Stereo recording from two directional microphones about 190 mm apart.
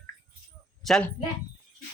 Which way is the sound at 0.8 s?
Centre (ahead or behind).